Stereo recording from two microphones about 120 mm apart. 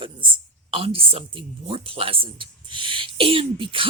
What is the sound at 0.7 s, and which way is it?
Speech, 50° right (ahead or behind).